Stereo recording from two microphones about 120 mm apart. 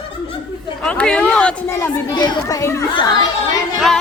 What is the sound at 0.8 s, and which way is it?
Speech, 10° left (ahead or behind).